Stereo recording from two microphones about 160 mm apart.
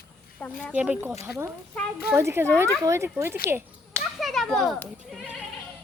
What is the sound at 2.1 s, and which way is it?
Speech, 15° right (ahead or behind).